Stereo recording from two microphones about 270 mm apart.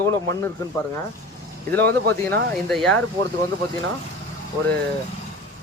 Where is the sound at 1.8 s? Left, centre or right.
Right.